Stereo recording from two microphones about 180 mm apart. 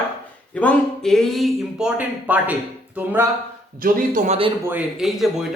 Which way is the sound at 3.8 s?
45° right (ahead or behind).